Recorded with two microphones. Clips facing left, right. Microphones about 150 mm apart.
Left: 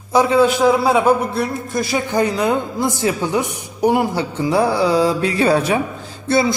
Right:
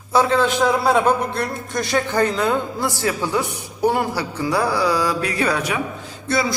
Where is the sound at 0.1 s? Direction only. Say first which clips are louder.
Left 4 dB; 15° left (ahead or behind).